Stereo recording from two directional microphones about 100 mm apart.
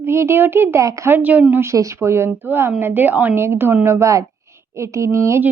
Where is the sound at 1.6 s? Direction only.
30° right (ahead or behind).